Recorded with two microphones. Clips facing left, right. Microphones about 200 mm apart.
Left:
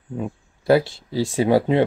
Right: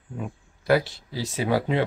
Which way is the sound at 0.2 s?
30° left (ahead or behind).